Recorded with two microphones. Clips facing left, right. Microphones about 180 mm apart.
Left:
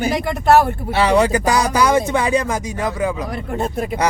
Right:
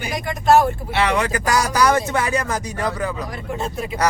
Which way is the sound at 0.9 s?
35° left (ahead or behind).